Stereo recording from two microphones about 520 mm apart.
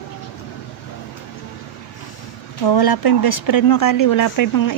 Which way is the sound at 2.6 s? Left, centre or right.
Left.